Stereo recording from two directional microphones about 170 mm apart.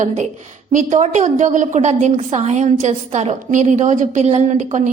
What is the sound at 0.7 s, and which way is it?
A woman's voice, 45° right (ahead or behind).